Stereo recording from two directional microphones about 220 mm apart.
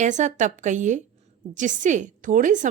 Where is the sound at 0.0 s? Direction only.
35° right (ahead or behind).